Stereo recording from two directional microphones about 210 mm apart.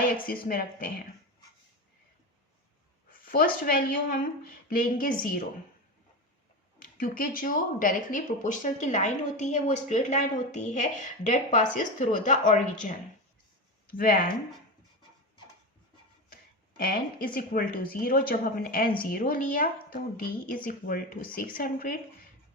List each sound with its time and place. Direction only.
0.0 s speech: 45° left (ahead or behind)
3.3 s speech: 45° left (ahead or behind)
6.7 s speech: 40° left (ahead or behind)
16.3 s speech: 40° left (ahead or behind)